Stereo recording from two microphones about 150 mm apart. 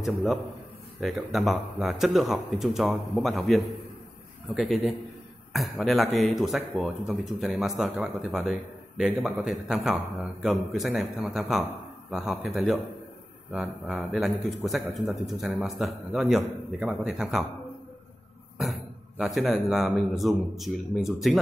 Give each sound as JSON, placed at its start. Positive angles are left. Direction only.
{"t": 0.0, "sound": "speech", "side_deg": 0}
{"t": 5.5, "sound": "speech", "side_deg": 0}
{"t": 18.6, "sound": "speech", "side_deg": 0}